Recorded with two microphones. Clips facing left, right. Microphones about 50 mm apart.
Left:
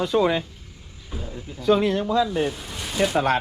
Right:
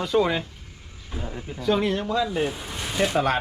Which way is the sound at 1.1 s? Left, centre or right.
Right.